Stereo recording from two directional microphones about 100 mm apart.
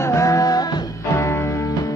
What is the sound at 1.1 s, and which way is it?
Music, 25° left (ahead or behind).